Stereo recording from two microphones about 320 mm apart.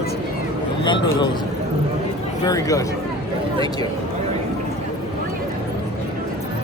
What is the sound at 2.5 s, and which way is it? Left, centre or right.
Speech, centre.